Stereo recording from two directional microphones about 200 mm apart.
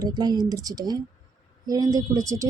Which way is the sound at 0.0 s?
20° right (ahead or behind).